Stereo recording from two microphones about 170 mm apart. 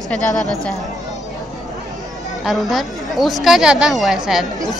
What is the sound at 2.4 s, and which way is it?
Speech, centre (ahead or behind).